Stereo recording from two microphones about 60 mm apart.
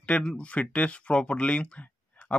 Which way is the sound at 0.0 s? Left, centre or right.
Left.